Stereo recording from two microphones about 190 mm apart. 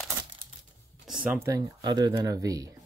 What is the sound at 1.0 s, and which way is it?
Speech, 5° right (ahead or behind).